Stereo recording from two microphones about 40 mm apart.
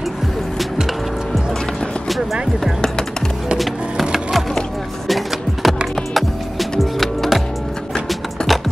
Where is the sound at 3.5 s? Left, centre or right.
Centre.